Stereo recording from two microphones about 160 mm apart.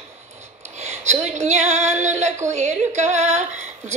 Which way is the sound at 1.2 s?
45° right (ahead or behind).